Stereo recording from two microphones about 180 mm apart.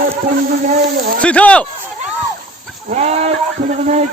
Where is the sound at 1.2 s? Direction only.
5° left (ahead or behind).